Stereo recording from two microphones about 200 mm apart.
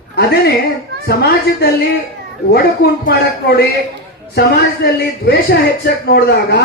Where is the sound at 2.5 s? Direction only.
55° left (ahead or behind).